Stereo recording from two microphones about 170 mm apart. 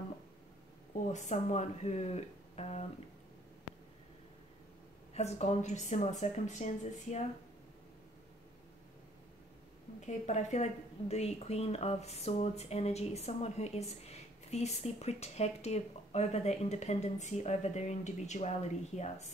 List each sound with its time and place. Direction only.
1.0 s speech: 45° left (ahead or behind)
5.1 s speech: 40° left (ahead or behind)
9.9 s speech: 45° left (ahead or behind)